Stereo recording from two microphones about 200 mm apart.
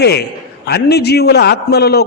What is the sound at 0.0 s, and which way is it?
A man's voice, 55° left (ahead or behind).